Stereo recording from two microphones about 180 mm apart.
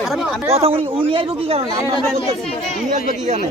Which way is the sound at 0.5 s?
30° right (ahead or behind).